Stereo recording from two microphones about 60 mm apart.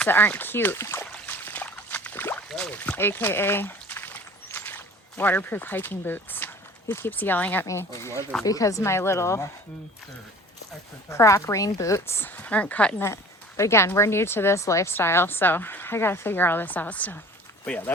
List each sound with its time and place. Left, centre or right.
0.0 s speech: left
1.3 s a sound: left
2.6 s pour: left
7.2 s speech: left
7.6 s a woman's voice: left
8.4 s speech: left
8.8 s a woman's voice: left
11.1 s speech: left
12.0 s a woman's voice: left
12.4 s a woman's voice: left
13.6 s a woman's voice: left
14.8 s speech: left